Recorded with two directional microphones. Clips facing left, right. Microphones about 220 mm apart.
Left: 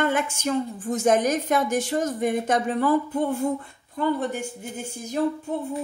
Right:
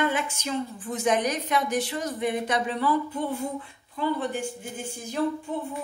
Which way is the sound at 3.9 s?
45° left (ahead or behind).